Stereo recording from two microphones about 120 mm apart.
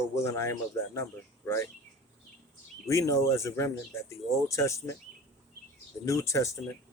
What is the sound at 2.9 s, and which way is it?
Speech, 25° left (ahead or behind).